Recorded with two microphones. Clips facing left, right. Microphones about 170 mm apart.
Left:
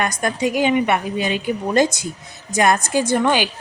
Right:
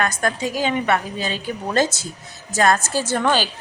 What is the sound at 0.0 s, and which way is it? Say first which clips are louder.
A woman's voice: left 2 dB; 15° left (ahead or behind).